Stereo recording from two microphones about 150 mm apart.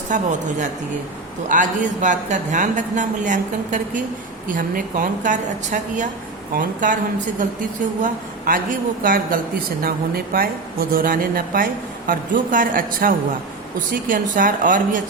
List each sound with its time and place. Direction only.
0.1 s a woman's voice: 55° right (ahead or behind)
9.8 s a woman's voice: 80° right; by 15.0 s 60° right (ahead or behind)